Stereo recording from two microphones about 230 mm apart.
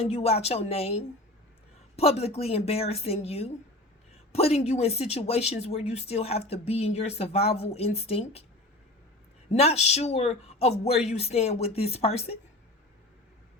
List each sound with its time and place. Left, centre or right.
0.0 s speech: left
9.5 s speech: left